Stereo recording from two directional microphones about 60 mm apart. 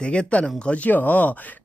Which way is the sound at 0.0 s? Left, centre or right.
Centre.